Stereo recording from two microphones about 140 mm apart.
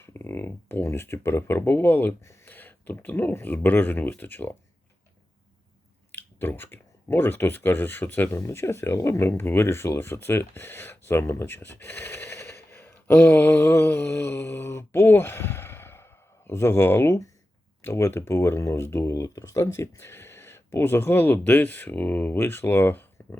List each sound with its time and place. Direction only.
0.0 s speech: 15° left (ahead or behind)
6.1 s speech: 15° left (ahead or behind)